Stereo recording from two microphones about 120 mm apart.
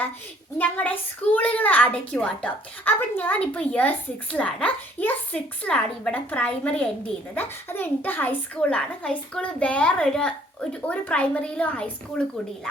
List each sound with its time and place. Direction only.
0.6 s a woman's voice: 15° left (ahead or behind)